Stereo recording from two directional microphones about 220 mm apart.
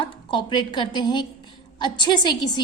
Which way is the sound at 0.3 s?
20° left (ahead or behind).